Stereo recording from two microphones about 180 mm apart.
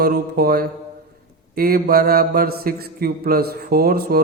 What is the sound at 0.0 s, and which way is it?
A man's voice, 60° right (ahead or behind).